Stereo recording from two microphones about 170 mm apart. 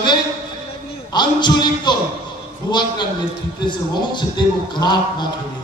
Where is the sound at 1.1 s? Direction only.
25° left (ahead or behind).